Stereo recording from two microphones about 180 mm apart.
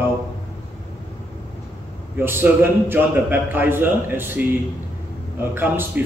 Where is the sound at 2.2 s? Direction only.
10° right (ahead or behind).